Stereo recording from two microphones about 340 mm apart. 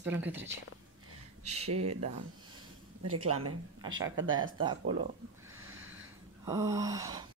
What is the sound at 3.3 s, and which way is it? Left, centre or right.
Speech, right.